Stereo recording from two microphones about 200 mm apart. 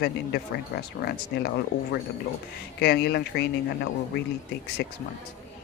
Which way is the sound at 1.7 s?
60° left (ahead or behind).